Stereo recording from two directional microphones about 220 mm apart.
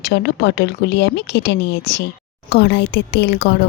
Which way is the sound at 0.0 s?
50° left (ahead or behind).